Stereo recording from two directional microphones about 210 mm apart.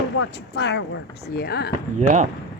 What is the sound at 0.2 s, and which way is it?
Speech, 55° left (ahead or behind).